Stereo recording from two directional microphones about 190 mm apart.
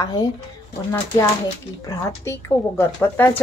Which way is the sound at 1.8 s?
15° left (ahead or behind).